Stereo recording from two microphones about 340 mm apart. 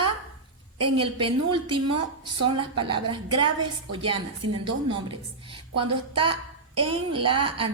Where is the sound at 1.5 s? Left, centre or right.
Centre.